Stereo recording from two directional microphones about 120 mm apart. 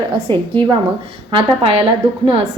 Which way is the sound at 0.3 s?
45° right (ahead or behind).